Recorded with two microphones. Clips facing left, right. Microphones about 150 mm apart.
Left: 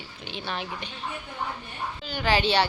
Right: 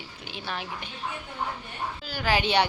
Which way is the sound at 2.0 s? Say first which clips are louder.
Left 2 dB; 5° right (ahead or behind).